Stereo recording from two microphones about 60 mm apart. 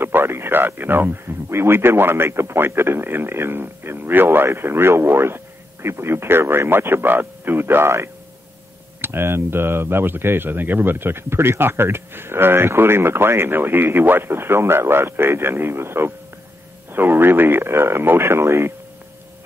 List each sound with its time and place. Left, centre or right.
0.0 s speech: right